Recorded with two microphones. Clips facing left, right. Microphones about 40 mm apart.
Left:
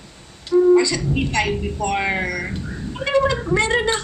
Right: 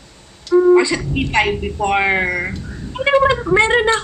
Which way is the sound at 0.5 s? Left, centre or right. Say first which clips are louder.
Right 3 dB; right.